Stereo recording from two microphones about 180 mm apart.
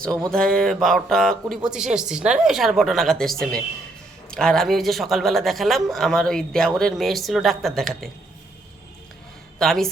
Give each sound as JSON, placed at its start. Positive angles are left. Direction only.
{"t": 0.3, "sound": "a man's voice", "side_deg": 5}
{"t": 9.6, "sound": "a man's voice", "side_deg": 0}